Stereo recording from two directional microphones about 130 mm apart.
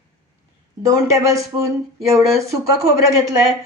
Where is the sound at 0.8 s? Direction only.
25° right (ahead or behind).